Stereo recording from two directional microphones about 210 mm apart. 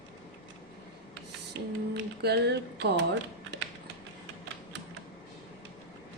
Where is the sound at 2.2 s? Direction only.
50° right (ahead or behind).